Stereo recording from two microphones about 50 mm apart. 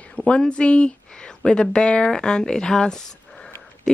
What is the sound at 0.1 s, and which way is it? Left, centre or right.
Speech, centre.